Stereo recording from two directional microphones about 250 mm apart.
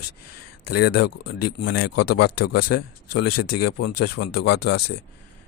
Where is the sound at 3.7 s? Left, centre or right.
Left.